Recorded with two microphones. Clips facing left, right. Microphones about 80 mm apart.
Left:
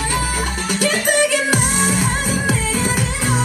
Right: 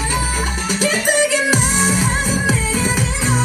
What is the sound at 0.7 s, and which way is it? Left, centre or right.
Music, left.